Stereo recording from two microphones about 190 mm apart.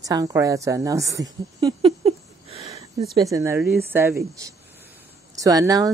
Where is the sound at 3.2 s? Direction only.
15° right (ahead or behind).